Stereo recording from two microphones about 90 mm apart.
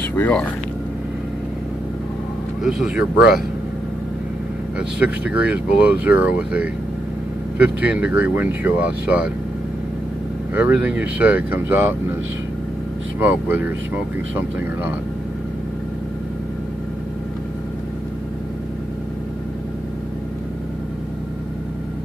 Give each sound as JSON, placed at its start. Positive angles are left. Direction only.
{"t": 2.6, "sound": "speech", "side_deg": -10}
{"t": 4.7, "sound": "speech", "side_deg": -15}
{"t": 10.5, "sound": "speech", "side_deg": -15}
{"t": 13.2, "sound": "speech", "side_deg": -20}